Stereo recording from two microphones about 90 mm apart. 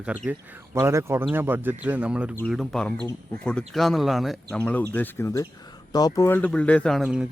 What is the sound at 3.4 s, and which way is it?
Speech, 10° left (ahead or behind).